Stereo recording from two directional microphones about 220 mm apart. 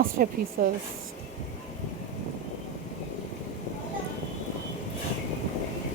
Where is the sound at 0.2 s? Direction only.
40° right (ahead or behind).